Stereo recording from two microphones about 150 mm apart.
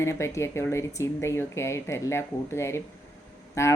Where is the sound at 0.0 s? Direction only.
20° left (ahead or behind).